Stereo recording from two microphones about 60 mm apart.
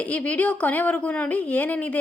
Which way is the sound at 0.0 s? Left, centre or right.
Left.